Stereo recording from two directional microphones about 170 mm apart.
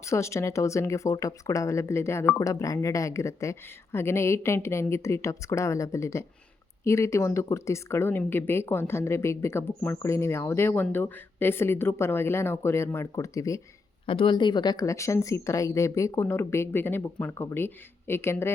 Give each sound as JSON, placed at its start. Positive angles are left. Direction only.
{"t": 0.0, "sound": "a woman's voice", "side_deg": 15}
{"t": 14.1, "sound": "a woman's voice", "side_deg": 30}